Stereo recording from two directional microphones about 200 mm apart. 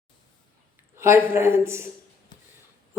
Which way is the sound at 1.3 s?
10° right (ahead or behind).